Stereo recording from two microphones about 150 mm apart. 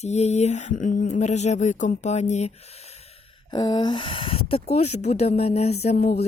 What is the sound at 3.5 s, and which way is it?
Speech, 30° left (ahead or behind).